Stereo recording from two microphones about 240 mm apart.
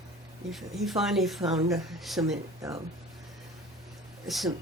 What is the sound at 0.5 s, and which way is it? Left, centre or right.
Speech, centre.